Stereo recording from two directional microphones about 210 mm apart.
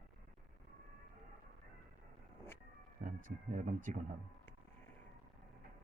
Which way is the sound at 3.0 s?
40° right (ahead or behind).